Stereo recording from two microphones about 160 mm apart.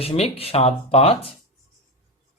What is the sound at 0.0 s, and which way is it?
Speech, 40° left (ahead or behind).